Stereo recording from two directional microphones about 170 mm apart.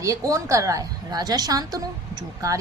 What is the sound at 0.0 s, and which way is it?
A woman's voice, 20° right (ahead or behind).